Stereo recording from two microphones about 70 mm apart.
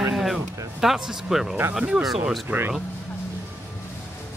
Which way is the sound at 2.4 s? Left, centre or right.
Right.